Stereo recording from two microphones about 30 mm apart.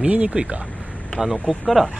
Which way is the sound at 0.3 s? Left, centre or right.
Right.